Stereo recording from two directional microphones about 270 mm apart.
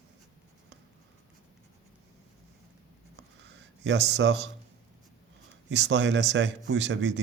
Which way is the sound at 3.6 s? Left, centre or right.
Right.